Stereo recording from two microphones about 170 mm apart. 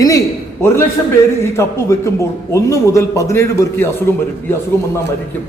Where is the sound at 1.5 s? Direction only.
15° left (ahead or behind).